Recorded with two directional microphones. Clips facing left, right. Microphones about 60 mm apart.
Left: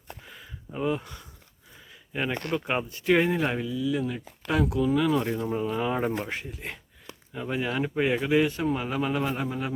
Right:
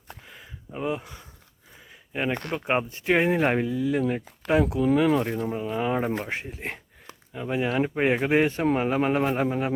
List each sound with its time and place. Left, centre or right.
0.3 s a sound: centre
1.9 s speech: centre
3.4 s speech: right
4.5 s speech: right
5.4 s speech: centre
6.1 s speech: right
7.3 s speech: centre; by 9.7 s right